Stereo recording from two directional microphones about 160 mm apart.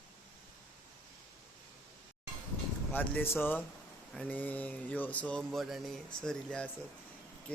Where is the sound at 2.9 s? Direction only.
10° left (ahead or behind).